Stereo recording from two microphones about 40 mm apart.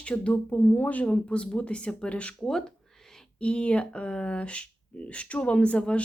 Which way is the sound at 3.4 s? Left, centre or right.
Left.